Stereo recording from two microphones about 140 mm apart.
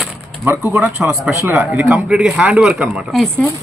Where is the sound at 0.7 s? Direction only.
15° right (ahead or behind).